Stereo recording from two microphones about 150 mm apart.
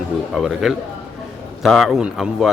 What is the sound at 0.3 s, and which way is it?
Speech, centre (ahead or behind).